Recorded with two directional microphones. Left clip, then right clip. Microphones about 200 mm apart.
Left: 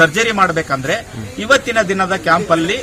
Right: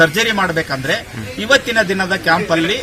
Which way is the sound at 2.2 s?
5° right (ahead or behind).